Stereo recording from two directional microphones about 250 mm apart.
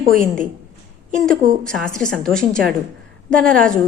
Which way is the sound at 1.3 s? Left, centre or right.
Centre.